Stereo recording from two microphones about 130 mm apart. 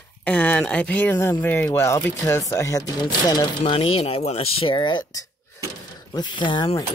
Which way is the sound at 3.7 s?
45° left (ahead or behind).